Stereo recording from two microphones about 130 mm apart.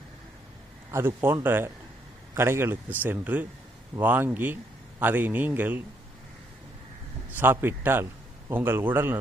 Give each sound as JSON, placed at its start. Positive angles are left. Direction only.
{"t": 0.9, "sound": "a man's voice", "side_deg": -20}
{"t": 7.3, "sound": "a man's voice", "side_deg": -15}